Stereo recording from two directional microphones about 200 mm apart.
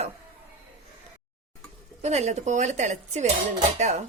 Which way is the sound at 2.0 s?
35° right (ahead or behind).